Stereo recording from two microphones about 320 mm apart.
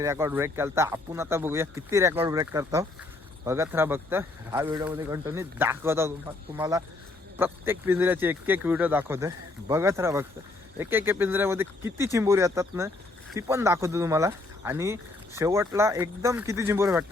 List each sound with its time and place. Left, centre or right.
0.0 s speech: centre